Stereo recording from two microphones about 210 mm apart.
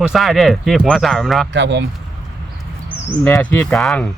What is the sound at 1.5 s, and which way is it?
Mantra, 55° right (ahead or behind).